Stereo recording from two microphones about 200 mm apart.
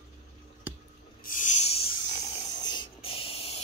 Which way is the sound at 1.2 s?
40° left (ahead or behind).